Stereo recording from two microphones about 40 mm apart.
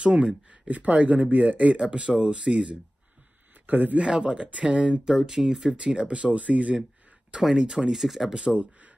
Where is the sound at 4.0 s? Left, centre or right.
Right.